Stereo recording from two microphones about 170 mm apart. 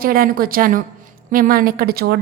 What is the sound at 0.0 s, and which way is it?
A woman's voice, 60° right (ahead or behind).